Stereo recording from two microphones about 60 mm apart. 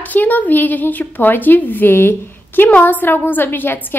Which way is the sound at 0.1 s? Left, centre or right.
Left.